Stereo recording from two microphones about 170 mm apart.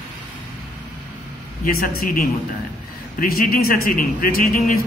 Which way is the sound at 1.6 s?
55° left (ahead or behind).